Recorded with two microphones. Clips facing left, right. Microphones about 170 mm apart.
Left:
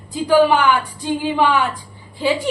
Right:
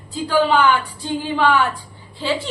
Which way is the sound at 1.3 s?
15° left (ahead or behind).